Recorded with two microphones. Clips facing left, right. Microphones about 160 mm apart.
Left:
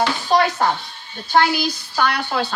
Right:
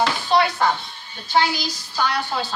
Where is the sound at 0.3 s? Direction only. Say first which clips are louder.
Left 2 dB; 45° left (ahead or behind).